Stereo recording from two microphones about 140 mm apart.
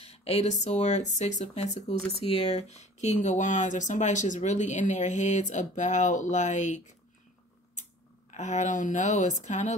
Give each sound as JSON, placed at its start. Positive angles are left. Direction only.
{"t": 0.0, "sound": "speech", "side_deg": 45}
{"t": 8.3, "sound": "speech", "side_deg": 60}